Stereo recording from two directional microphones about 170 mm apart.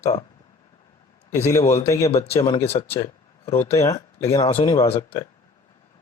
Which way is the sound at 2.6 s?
35° left (ahead or behind).